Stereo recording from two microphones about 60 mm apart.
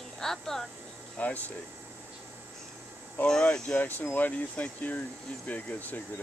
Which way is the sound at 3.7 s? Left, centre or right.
Left.